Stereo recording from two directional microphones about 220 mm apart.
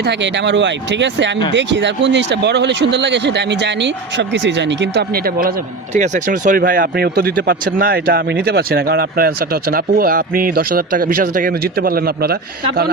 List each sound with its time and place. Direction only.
0.0 s speech: 50° right (ahead or behind)